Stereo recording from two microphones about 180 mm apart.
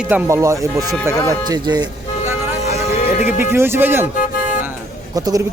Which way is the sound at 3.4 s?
15° right (ahead or behind).